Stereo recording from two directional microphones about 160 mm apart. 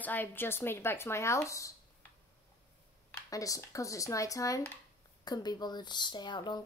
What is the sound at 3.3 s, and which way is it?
Speech, 20° left (ahead or behind).